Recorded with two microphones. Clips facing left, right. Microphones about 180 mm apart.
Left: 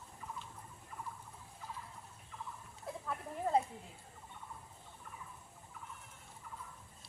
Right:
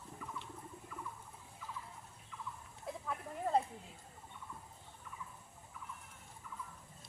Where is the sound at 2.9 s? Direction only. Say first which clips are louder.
Even; centre (ahead or behind).